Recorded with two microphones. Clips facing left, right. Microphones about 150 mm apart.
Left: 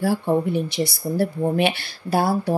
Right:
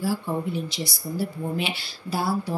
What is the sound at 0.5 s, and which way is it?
A woman's voice, 60° left (ahead or behind).